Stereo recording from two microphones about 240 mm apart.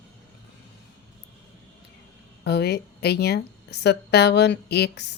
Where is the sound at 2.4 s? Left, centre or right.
Left.